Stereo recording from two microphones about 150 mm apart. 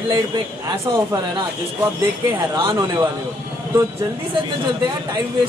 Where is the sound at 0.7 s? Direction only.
30° right (ahead or behind).